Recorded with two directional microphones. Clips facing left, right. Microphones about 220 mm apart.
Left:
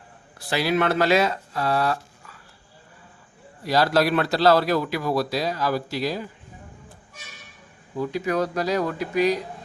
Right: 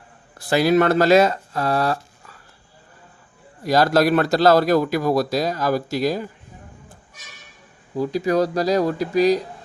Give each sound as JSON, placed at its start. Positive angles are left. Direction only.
{"t": 0.3, "sound": "speech", "side_deg": -45}
{"t": 3.6, "sound": "a man's voice", "side_deg": -45}
{"t": 7.9, "sound": "speech", "side_deg": -35}